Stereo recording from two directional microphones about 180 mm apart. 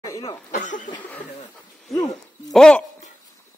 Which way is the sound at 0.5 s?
45° left (ahead or behind).